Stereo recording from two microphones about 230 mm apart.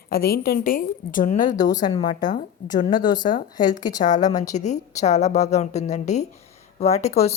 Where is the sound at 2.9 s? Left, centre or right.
Centre.